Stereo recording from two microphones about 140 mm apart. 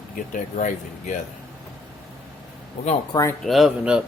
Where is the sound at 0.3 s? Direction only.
60° left (ahead or behind).